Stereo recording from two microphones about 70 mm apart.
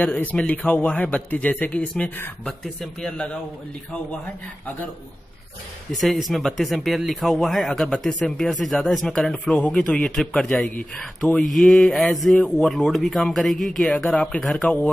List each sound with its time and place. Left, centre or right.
0.0 s speech: left
2.4 s a man's voice: centre
5.9 s a man's voice: centre
14.1 s a man's voice: centre